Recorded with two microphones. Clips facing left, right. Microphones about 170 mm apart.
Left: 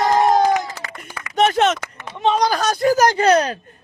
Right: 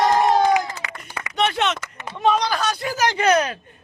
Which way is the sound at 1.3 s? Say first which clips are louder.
Left 6 dB; 40° left (ahead or behind).